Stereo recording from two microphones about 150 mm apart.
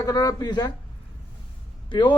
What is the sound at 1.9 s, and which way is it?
Speech, 30° left (ahead or behind).